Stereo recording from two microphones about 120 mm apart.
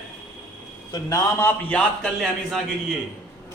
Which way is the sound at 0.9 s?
30° left (ahead or behind).